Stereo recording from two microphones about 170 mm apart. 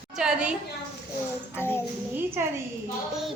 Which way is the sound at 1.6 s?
15° left (ahead or behind).